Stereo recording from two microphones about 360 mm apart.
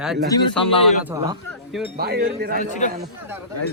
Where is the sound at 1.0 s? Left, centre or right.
Centre.